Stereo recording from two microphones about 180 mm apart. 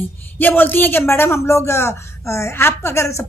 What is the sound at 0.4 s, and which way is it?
Speech, 10° left (ahead or behind).